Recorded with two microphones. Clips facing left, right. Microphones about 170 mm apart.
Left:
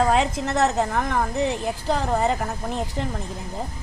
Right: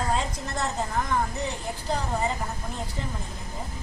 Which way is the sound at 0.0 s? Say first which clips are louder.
Left 8 dB; 75° left (ahead or behind).